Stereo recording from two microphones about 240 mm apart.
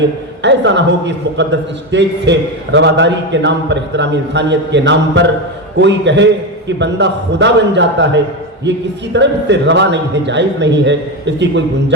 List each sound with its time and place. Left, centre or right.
0.4 s a man's voice: right